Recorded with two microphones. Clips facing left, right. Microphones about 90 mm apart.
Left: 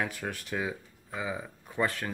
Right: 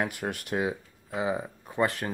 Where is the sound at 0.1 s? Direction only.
65° right (ahead or behind).